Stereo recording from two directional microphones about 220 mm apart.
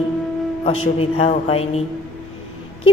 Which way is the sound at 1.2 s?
25° left (ahead or behind).